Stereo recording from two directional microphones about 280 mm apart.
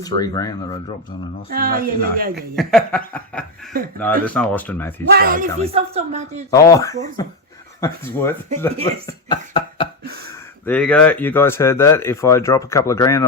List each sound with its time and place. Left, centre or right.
0.0 s speech: centre
1.5 s speech: right
2.3 s speech: centre
3.7 s speech: right
4.3 s speech: centre
5.1 s speech: right
6.5 s speech: centre
9.5 s cough: centre
10.7 s speech: centre